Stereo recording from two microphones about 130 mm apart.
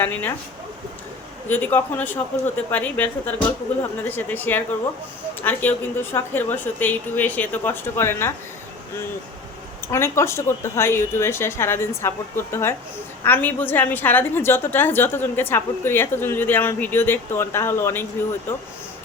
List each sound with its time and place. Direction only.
0.0 s a woman's voice: 15° left (ahead or behind)
1.5 s a woman's voice: 15° left (ahead or behind)
9.9 s a woman's voice: 20° left (ahead or behind)